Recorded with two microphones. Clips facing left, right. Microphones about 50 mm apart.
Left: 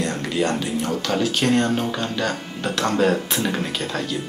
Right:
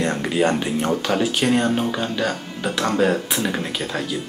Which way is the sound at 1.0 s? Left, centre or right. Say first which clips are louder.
Right 1 dB; centre.